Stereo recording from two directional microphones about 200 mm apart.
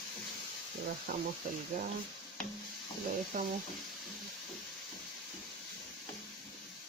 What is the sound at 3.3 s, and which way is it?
Speech, 45° right (ahead or behind).